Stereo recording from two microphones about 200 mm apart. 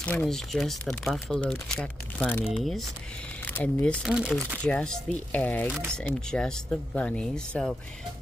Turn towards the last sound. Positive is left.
turn(degrees=0)  # may be behind; listen again after turning